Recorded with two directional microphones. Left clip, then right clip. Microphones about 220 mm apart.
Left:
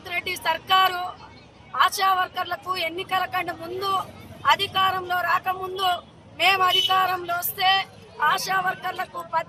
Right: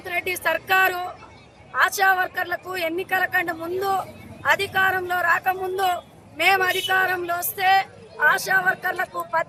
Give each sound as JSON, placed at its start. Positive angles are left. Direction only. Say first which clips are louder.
{"t": 0.0, "sound": "speech", "louder": "right 2 dB", "side_deg": 0}